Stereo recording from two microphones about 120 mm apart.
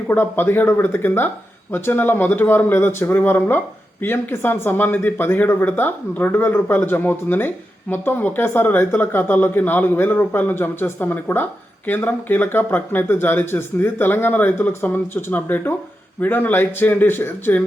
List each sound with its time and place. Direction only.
0.1 s speech: 15° left (ahead or behind)